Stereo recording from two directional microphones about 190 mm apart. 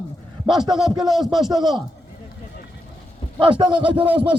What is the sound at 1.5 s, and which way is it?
Speech, 20° right (ahead or behind).